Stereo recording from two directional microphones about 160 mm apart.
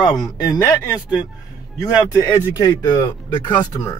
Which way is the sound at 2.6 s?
25° left (ahead or behind).